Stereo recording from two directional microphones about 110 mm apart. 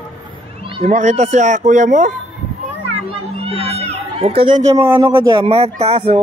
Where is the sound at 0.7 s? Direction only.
80° right.